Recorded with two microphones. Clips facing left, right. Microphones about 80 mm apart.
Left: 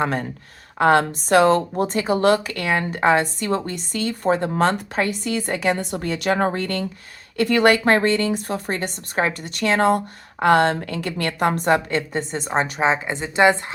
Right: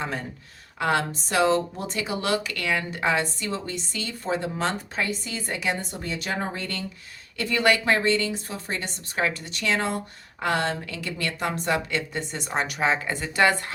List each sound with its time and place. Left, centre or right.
0.0 s a woman's voice: left
0.8 s speech: left
5.8 s a woman's voice: left